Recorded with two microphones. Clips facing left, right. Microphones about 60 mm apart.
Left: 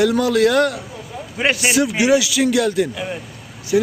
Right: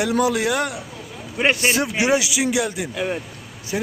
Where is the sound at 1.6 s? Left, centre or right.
Right.